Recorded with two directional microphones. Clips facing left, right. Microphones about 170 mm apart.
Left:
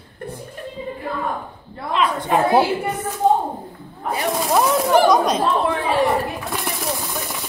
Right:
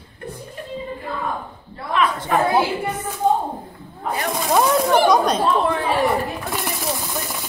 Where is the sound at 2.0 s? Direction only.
15° left (ahead or behind).